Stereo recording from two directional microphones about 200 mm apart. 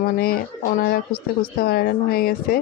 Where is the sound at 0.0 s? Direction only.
50° left (ahead or behind).